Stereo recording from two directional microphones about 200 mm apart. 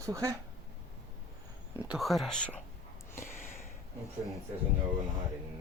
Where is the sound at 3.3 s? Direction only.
10° left (ahead or behind).